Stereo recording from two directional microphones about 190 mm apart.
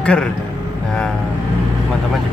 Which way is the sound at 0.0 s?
5° left (ahead or behind).